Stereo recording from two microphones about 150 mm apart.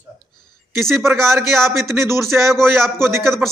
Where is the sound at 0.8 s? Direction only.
Centre (ahead or behind).